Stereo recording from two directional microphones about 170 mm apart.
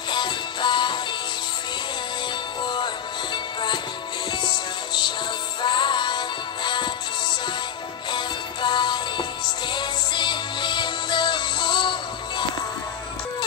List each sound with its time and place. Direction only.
0.1 s music: 25° left (ahead or behind)
2.6 s music: 25° left (ahead or behind)
4.3 s music: 25° left (ahead or behind)
8.1 s music: 25° left (ahead or behind)